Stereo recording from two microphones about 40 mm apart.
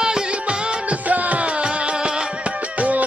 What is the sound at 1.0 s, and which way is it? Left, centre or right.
Music, right.